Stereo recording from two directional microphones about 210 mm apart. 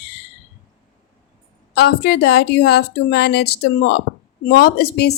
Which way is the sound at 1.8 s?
50° left (ahead or behind).